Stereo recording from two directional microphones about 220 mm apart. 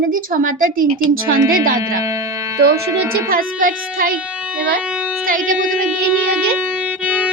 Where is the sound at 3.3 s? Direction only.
40° right (ahead or behind).